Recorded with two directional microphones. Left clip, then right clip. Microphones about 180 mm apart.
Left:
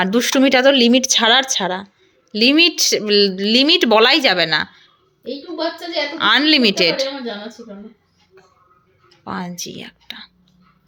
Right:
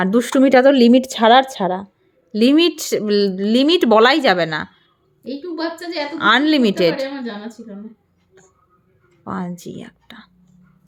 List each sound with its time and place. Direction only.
0.0 s speech: 25° right (ahead or behind)
9.2 s speech: 25° right (ahead or behind)